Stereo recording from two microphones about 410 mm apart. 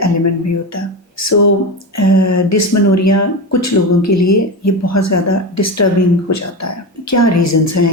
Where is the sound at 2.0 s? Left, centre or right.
Left.